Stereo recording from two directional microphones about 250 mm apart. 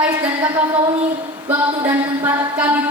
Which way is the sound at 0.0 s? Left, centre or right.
Centre.